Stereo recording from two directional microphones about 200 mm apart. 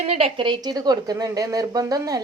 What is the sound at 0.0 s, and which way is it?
A woman's voice, 30° right (ahead or behind).